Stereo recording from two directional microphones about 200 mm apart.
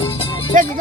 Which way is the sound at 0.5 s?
40° right (ahead or behind).